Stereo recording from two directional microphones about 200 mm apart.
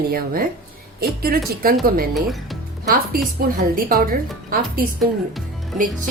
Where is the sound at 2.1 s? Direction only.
Centre (ahead or behind).